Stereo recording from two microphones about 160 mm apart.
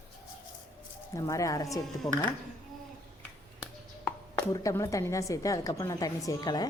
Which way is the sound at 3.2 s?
10° left (ahead or behind).